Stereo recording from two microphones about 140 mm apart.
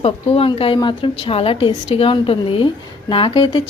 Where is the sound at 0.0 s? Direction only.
45° left (ahead or behind).